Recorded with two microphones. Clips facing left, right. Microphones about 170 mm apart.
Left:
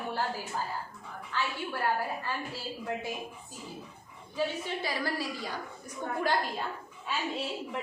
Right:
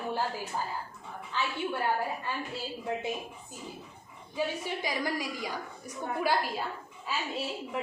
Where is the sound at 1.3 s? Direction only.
20° right (ahead or behind).